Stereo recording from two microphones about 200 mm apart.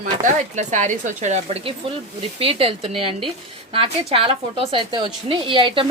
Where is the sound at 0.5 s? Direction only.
35° right (ahead or behind).